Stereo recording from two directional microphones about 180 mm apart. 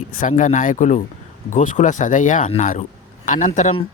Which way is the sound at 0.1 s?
45° left (ahead or behind).